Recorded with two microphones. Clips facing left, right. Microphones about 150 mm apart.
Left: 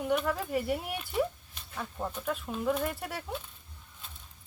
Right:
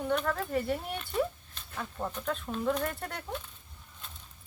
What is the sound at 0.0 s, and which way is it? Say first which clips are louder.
Speech: left 1 dB; 10° left (ahead or behind).